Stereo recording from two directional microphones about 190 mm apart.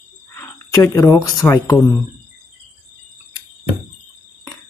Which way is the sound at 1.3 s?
20° left (ahead or behind).